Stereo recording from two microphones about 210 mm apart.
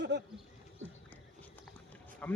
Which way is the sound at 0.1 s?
55° right (ahead or behind).